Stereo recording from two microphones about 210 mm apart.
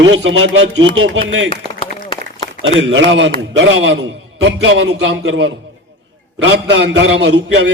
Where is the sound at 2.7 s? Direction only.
65° right (ahead or behind).